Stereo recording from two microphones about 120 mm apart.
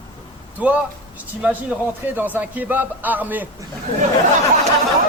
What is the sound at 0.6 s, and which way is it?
A man's voice, 10° right (ahead or behind).